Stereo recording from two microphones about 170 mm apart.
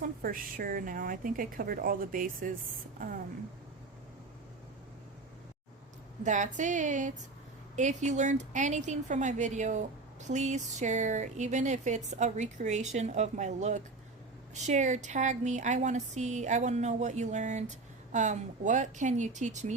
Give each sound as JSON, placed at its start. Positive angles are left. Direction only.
{"t": 0.0, "sound": "a woman's voice", "side_deg": -55}
{"t": 6.2, "sound": "a woman's voice", "side_deg": -45}